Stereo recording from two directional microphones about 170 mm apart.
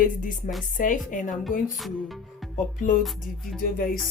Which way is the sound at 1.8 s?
Centre (ahead or behind).